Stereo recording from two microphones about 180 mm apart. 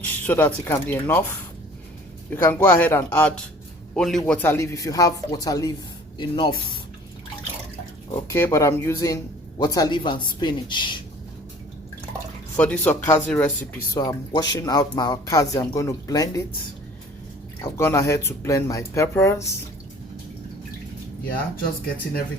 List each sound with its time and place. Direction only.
0.0 s a man's voice: 10° left (ahead or behind)
4.3 s speech: 10° left (ahead or behind); by 6.5 s 25° left (ahead or behind)
8.3 s speech: 15° left (ahead or behind)
12.5 s speech: 10° left (ahead or behind)
13.9 s speech: 20° left (ahead or behind)
17.6 s speech: 15° left (ahead or behind)